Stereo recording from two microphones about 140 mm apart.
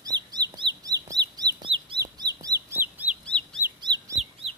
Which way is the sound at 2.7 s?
15° right (ahead or behind).